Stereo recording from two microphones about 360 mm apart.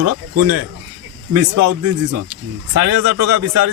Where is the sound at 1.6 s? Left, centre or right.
Right.